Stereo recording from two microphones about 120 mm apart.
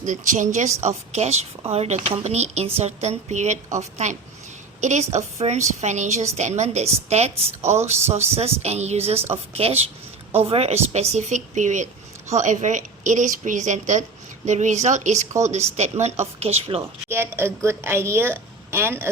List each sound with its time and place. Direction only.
0.0 s a woman's voice: 90° right
0.8 s a woman's voice: 70° right (ahead or behind)
11.1 s a woman's voice: 80° right
15.5 s speech: 65° right (ahead or behind)
17.1 s a woman's voice: 20° right (ahead or behind)